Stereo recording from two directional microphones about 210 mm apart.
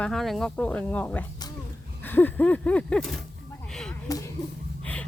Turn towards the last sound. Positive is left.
turn(degrees=5)  # may be behind; listen again after turning